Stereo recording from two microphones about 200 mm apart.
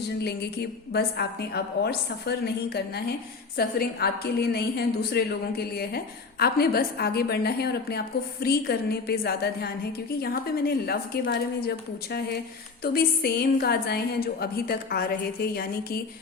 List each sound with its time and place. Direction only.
0.9 s a woman's voice: 55° left (ahead or behind)